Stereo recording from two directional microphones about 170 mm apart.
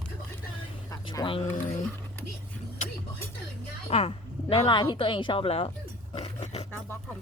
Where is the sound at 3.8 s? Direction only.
35° left (ahead or behind).